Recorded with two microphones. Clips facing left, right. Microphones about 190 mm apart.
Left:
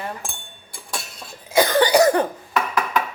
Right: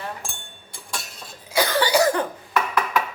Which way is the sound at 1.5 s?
50° left (ahead or behind).